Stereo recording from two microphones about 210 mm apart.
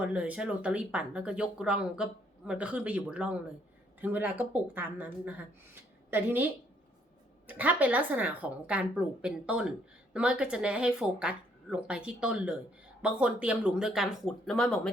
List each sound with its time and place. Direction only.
0.0 s a woman's voice: 5° right (ahead or behind)